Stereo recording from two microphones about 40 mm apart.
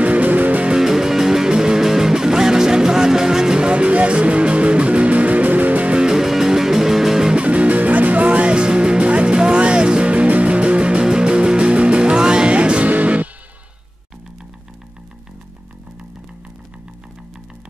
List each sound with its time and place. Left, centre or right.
0.0 s music: right
0.7 s music: centre; by 5.9 s right
5.9 s music: centre
7.3 s music: right